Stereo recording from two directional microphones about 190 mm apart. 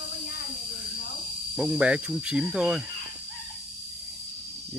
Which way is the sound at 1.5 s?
5° right (ahead or behind).